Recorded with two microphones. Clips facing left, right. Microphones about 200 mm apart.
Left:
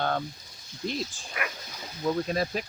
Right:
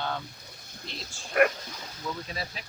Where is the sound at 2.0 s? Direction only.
45° left (ahead or behind).